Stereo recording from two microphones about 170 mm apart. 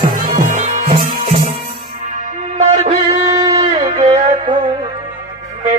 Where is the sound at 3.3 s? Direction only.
20° right (ahead or behind).